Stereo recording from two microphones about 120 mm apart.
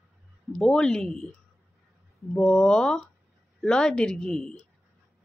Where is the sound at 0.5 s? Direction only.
5° left (ahead or behind).